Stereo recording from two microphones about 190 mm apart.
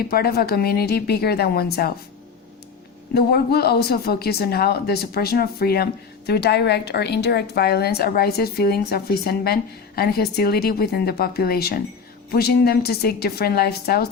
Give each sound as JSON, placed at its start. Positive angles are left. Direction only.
{"t": 0.0, "sound": "speech", "side_deg": 55}
{"t": 3.2, "sound": "speech", "side_deg": 55}